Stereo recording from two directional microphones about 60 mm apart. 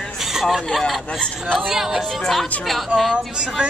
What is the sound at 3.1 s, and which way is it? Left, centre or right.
Speech, centre.